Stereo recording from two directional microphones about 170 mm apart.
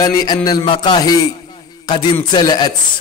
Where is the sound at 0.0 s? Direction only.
25° left (ahead or behind).